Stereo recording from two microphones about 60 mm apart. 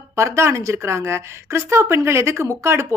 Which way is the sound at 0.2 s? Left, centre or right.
Right.